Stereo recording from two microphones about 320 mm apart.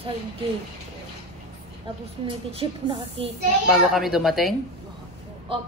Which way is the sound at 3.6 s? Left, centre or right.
Centre.